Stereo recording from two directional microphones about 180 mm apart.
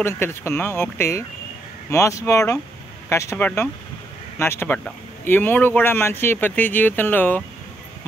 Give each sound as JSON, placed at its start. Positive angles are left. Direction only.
{"t": 0.0, "sound": "speech", "side_deg": 15}